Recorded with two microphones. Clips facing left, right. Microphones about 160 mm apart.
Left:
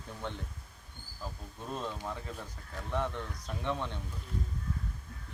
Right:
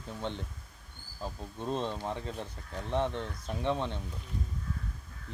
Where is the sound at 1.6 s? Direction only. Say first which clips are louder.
Right 5 dB; 25° right (ahead or behind).